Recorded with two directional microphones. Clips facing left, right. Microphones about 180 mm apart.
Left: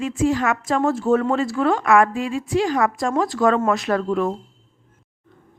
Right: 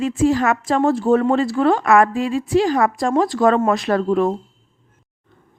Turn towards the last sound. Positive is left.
turn(degrees=-35)  # may be behind; listen again after turning